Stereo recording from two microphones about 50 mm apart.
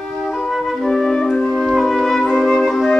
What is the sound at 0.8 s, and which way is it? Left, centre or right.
Music, centre.